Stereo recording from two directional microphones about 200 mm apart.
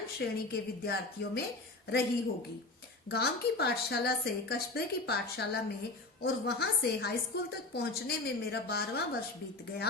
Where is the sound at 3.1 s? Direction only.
55° left (ahead or behind).